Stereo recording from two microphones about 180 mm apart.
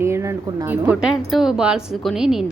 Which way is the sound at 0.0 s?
15° right (ahead or behind).